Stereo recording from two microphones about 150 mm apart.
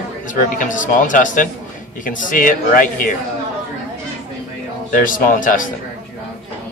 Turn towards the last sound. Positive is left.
turn(degrees=60)  # may be behind; listen again after turning